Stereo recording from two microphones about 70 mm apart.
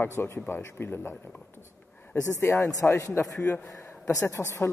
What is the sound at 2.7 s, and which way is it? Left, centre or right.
Speech, left.